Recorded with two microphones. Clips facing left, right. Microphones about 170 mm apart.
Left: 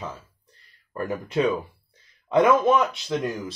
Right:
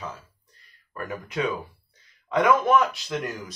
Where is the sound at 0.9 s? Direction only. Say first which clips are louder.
Left 5 dB; 25° left (ahead or behind).